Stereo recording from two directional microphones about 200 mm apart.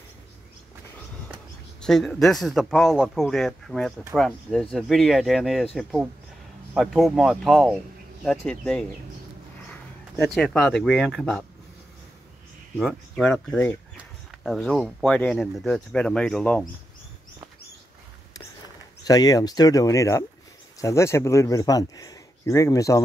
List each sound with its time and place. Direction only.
1.8 s speech: 5° left (ahead or behind)
12.7 s speech: 5° left (ahead or behind)
19.0 s a man's voice: 20° left (ahead or behind)